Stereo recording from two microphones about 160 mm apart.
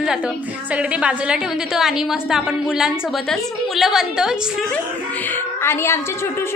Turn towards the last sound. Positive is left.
turn(degrees=15)  # may be behind; listen again after turning